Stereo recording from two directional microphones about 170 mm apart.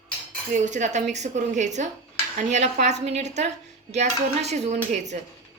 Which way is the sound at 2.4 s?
45° right (ahead or behind).